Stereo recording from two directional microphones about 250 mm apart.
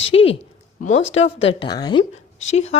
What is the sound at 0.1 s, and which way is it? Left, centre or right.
Speech, left.